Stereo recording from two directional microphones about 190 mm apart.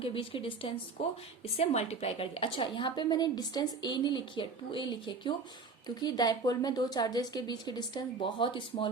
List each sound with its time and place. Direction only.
0.0 s a woman's voice: 30° left (ahead or behind)